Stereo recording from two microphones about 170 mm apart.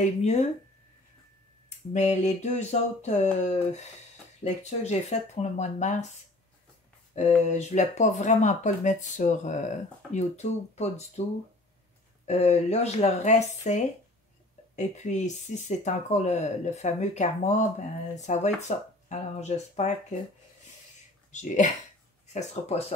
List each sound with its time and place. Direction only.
0.0 s speech: 40° left (ahead or behind)
1.9 s speech: 45° left (ahead or behind)
7.2 s speech: 40° left (ahead or behind)
12.3 s speech: 40° left (ahead or behind)
21.3 s speech: 45° left (ahead or behind)